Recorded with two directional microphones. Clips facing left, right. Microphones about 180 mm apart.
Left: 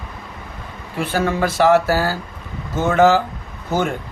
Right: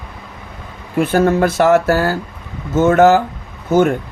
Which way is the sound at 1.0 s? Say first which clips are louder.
Right 6 dB; 50° right (ahead or behind).